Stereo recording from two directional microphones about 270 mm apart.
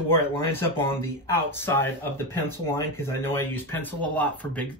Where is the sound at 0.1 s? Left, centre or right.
Centre.